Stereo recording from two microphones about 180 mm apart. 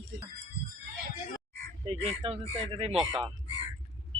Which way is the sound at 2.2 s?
30° right (ahead or behind).